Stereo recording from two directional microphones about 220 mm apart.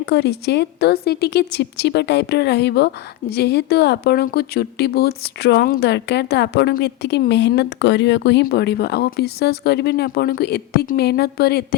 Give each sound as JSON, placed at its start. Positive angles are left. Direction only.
{"t": 0.0, "sound": "a woman's voice", "side_deg": 50}